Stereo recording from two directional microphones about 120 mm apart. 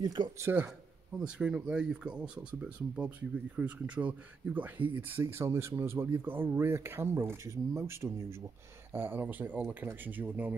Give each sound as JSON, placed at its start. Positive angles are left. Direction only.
{"t": 0.0, "sound": "speech", "side_deg": -35}
{"t": 0.5, "sound": "speech", "side_deg": -15}